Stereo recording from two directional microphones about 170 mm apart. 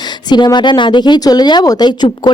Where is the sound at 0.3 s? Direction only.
25° left (ahead or behind).